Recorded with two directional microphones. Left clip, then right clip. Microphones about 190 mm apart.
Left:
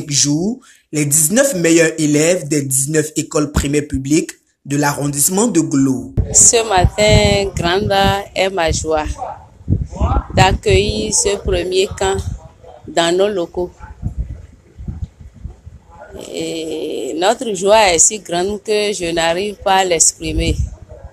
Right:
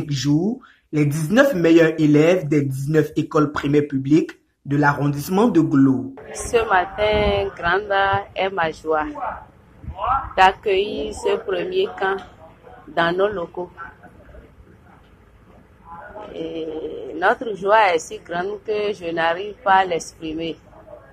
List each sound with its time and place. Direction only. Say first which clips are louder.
0.1 s speech: left 5 dB; 25° left (ahead or behind)
6.5 s speech: left 4 dB; 65° left (ahead or behind)
10.3 s speech: left 4 dB; 65° left (ahead or behind)
16.3 s speech: left 6 dB; 70° left (ahead or behind)